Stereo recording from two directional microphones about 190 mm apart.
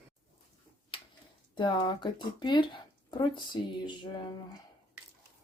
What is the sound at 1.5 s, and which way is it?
Speech, 25° left (ahead or behind).